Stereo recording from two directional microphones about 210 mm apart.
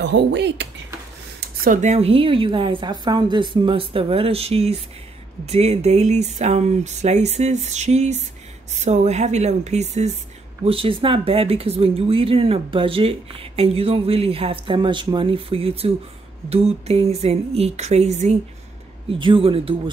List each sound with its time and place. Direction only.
0.0 s speech: 55° right (ahead or behind)
1.6 s speech: 35° right (ahead or behind)